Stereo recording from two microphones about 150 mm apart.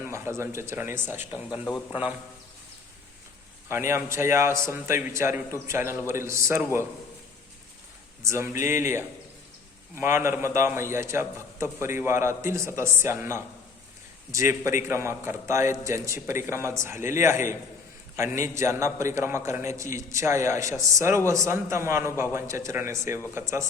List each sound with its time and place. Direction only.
0.0 s a man's voice: 20° right (ahead or behind)
1.6 s a man's voice: 20° left (ahead or behind)
3.7 s a man's voice: 15° right (ahead or behind)
8.2 s a man's voice: 20° right (ahead or behind)